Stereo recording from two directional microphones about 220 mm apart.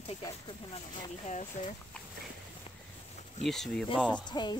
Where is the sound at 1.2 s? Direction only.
35° left (ahead or behind).